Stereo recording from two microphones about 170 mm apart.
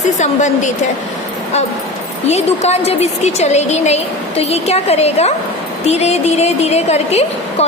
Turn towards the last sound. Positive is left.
turn(degrees=40)  # may be behind; listen again after turning